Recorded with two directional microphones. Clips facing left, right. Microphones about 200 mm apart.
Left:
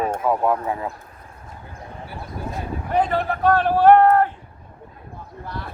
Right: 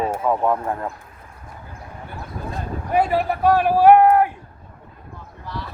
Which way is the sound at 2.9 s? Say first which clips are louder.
Right 2 dB; 10° right (ahead or behind).